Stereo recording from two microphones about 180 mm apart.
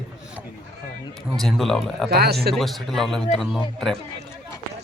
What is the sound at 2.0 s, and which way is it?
Speech, 65° right (ahead or behind).